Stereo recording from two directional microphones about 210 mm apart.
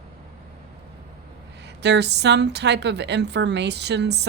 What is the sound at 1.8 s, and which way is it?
A woman's voice, 55° right (ahead or behind).